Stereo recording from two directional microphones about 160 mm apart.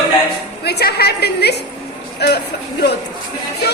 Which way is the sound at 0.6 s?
85° left.